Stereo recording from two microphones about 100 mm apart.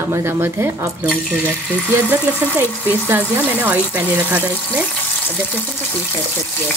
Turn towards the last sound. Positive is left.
turn(degrees=-15)  # may be behind; listen again after turning